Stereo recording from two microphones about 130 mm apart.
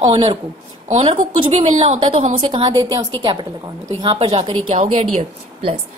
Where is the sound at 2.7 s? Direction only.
30° right (ahead or behind).